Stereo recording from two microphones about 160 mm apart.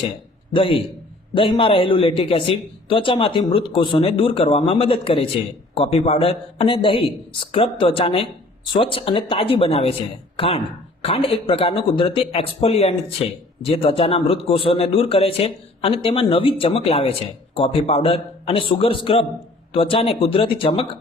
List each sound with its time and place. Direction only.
0.5 s a man's voice: 35° left (ahead or behind)